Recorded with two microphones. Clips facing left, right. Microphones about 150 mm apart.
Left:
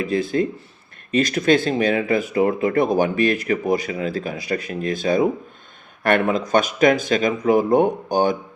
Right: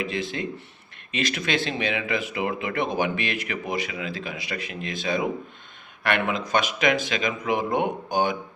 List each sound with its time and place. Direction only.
0.0 s speech: 45° left (ahead or behind)